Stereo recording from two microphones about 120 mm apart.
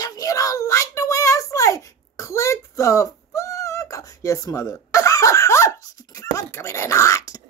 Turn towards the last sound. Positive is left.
turn(degrees=25)  # may be behind; listen again after turning